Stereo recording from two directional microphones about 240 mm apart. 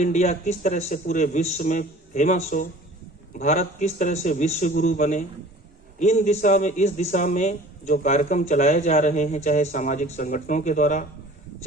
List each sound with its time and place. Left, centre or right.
0.0 s a man's voice: left